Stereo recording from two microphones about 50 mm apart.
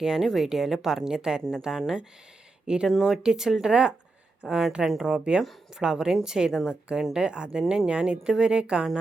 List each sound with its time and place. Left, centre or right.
0.0 s speech: centre
2.9 s speech: centre
3.2 s speech: centre